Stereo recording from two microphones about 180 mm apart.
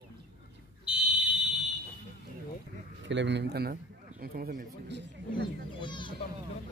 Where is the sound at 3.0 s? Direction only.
80° right; by 5.4 s 60° right (ahead or behind).